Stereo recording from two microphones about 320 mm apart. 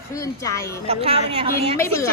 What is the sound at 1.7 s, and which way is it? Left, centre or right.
Speech, centre.